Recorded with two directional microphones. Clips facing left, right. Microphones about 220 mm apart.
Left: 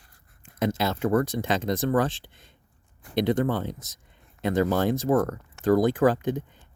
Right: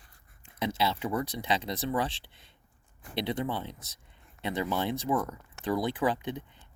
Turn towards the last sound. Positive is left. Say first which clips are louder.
# left 8 dB
turn(degrees=45)  # may be behind; listen again after turning